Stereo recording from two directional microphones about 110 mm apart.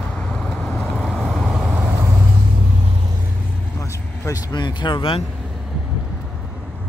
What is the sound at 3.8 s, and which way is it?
Vehicle, 30° left (ahead or behind).